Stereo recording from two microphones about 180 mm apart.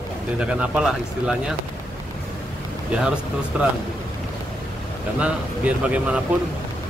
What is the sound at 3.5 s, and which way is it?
Speech, 5° right (ahead or behind).